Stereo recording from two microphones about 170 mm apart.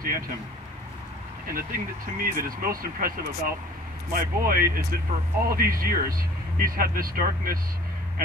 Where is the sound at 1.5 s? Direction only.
55° right (ahead or behind).